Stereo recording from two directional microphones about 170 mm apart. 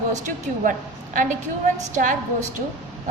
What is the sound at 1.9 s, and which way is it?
Speech, 50° right (ahead or behind).